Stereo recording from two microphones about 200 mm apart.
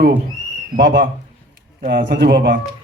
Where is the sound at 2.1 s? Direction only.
55° right (ahead or behind).